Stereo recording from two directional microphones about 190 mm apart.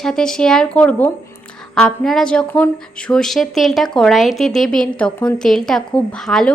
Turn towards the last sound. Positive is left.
turn(degrees=0)  # may be behind; listen again after turning